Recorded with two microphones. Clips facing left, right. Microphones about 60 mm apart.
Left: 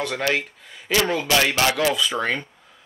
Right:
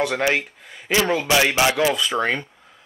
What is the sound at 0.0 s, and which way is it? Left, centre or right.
Speech, centre.